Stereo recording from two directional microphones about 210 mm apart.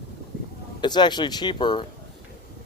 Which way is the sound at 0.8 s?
20° left (ahead or behind).